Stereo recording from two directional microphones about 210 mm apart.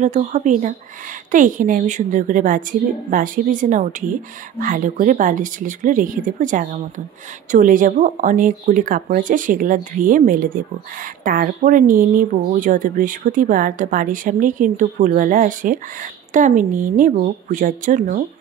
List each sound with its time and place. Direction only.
0.0 s speech: 35° right (ahead or behind)